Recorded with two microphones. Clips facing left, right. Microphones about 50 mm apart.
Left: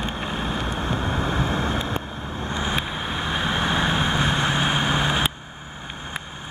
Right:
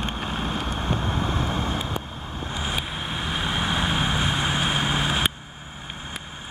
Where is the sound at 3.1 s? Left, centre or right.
Centre.